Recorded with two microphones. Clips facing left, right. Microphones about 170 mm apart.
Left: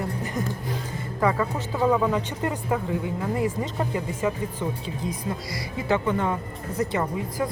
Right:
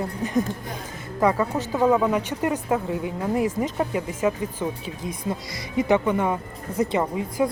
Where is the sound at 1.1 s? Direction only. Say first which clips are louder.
Right 3 dB; 10° right (ahead or behind).